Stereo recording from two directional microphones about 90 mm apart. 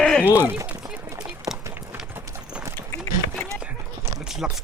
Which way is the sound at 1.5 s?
35° right (ahead or behind).